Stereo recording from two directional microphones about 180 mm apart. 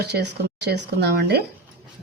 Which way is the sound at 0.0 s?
65° right (ahead or behind).